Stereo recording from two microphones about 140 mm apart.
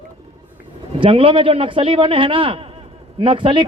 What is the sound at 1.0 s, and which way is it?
A man's voice, 40° right (ahead or behind).